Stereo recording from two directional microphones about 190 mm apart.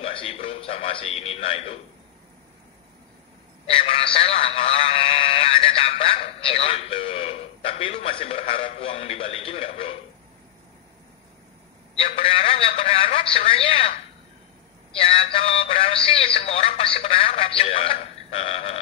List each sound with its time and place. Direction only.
0.0 s speech: 30° left (ahead or behind)
3.6 s a man's voice: 30° left (ahead or behind)
11.9 s speech: 30° left (ahead or behind)
15.0 s speech: 30° left (ahead or behind)